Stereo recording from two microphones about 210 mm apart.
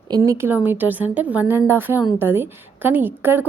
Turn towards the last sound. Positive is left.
turn(degrees=-10)  # may be behind; listen again after turning